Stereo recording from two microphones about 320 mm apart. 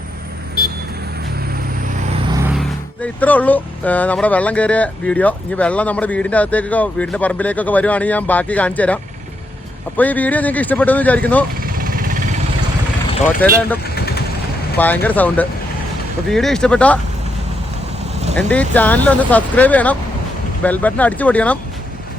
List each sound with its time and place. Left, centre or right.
2.3 s speech: centre
10.0 s speech: centre
11.6 s vehicle: right
13.4 s speech: centre
13.9 s vehicle: left
14.8 s speech: centre
18.3 s speech: centre